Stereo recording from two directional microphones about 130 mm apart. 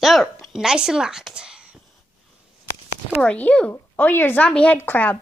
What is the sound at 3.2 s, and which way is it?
A woman's voice, 10° left (ahead or behind).